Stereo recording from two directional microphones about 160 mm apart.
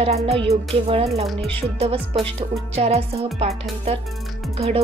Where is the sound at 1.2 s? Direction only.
5° left (ahead or behind).